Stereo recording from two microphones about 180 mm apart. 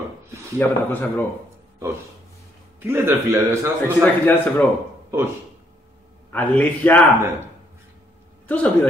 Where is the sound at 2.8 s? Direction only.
10° right (ahead or behind).